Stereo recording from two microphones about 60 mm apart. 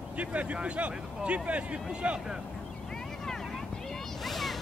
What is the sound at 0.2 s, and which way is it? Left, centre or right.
Speech, right.